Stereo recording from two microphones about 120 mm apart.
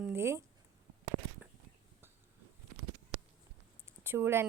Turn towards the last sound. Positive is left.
turn(degrees=-20)  # may be behind; listen again after turning